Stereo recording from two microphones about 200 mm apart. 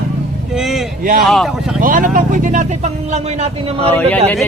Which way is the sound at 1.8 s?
45° right (ahead or behind).